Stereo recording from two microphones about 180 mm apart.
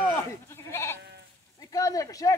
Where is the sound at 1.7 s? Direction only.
20° left (ahead or behind).